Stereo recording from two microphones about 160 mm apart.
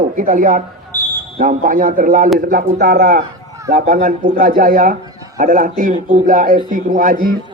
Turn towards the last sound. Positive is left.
turn(degrees=-60)  # may be behind; listen again after turning